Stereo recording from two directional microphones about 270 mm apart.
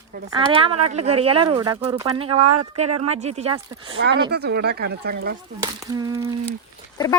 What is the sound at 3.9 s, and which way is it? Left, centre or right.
Speech, right.